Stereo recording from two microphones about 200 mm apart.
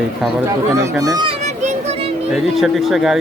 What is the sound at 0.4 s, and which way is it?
Children playing, 15° right (ahead or behind).